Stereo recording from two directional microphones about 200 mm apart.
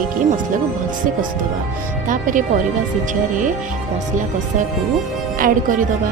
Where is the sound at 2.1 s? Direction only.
40° right (ahead or behind).